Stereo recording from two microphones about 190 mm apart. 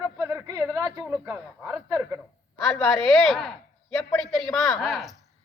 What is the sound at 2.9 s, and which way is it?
A woman's voice, centre (ahead or behind).